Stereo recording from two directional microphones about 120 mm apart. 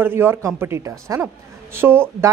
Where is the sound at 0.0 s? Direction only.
20° right (ahead or behind).